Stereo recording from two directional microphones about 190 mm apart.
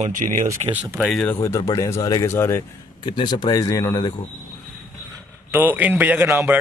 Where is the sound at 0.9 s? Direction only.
Centre (ahead or behind).